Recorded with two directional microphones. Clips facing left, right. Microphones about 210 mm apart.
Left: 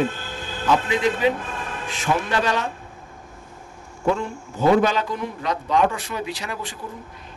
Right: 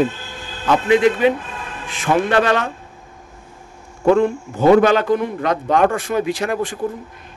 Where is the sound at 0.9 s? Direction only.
60° right (ahead or behind).